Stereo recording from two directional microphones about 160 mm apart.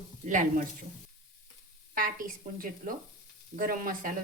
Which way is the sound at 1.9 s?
60° right (ahead or behind).